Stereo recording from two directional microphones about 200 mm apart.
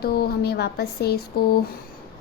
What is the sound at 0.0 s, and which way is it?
A woman's voice, 50° left (ahead or behind).